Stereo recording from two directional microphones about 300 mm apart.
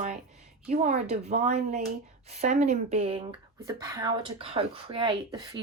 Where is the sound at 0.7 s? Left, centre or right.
Right.